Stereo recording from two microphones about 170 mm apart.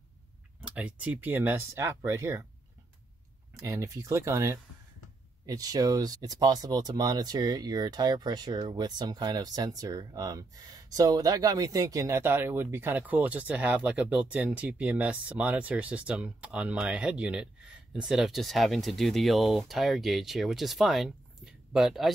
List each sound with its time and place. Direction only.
0.6 s speech: 10° right (ahead or behind)
3.5 s speech: 20° right (ahead or behind); by 22.1 s centre (ahead or behind)